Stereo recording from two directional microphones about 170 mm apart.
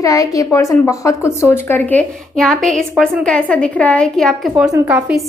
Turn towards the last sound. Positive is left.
turn(degrees=-15)  # may be behind; listen again after turning